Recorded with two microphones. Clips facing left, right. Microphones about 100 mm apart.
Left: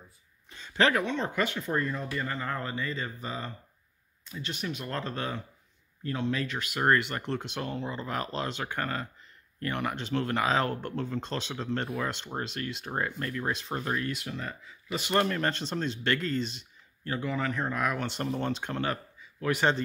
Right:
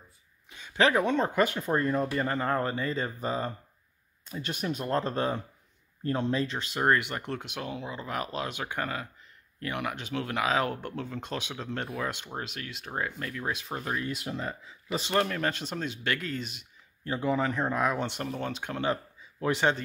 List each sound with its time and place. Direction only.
0.5 s a sound: 10° right (ahead or behind)
1.0 s speech: 40° right (ahead or behind)
4.6 s speech: 35° right (ahead or behind)
6.8 s speech: 15° right (ahead or behind)
14.1 s speech: 30° right (ahead or behind)
15.1 s speech: centre (ahead or behind)
17.2 s speech: 30° right (ahead or behind)
18.2 s speech: 5° right (ahead or behind)
19.4 s speech: 20° right (ahead or behind)